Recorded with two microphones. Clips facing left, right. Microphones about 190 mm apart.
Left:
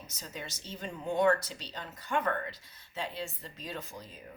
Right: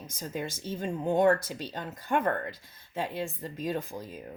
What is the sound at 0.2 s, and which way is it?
Speech, 50° right (ahead or behind).